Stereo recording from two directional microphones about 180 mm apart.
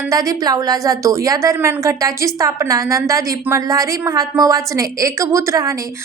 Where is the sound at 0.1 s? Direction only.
20° right (ahead or behind).